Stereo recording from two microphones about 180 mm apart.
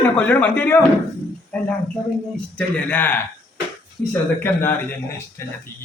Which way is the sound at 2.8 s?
10° left (ahead or behind).